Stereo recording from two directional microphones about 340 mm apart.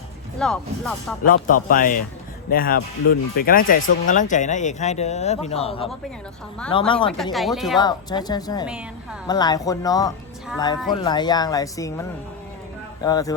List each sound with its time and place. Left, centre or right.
0.3 s speech: centre
1.6 s speech: left
7.3 s speech: centre
7.8 s speech: centre
10.8 s speech: centre
11.1 s speech: centre